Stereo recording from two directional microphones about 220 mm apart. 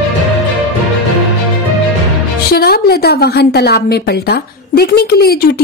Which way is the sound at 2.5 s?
45° left (ahead or behind).